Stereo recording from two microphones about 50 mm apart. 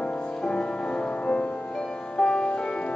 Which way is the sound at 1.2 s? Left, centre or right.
Left.